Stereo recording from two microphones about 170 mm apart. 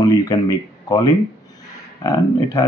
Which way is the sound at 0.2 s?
20° left (ahead or behind).